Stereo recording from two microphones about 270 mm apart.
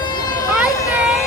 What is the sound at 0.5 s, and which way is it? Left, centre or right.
Vehicle, centre.